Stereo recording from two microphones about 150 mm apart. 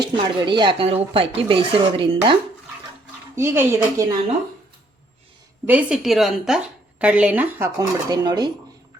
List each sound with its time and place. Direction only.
0.0 s speech: 30° right (ahead or behind)
3.3 s a woman's voice: 15° right (ahead or behind)
5.6 s a woman's voice: 5° right (ahead or behind)
7.8 s speech: 25° right (ahead or behind)